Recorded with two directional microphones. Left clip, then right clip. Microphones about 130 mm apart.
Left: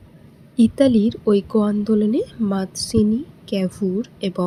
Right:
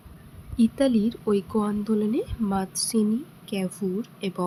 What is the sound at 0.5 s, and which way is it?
Speech, 35° left (ahead or behind).